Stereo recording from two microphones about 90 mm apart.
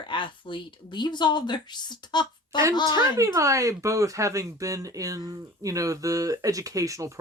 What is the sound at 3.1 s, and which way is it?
A woman's voice, 35° right (ahead or behind).